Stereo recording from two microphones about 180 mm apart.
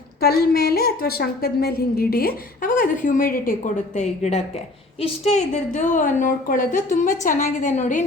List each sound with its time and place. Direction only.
0.2 s a woman's voice: 60° left (ahead or behind)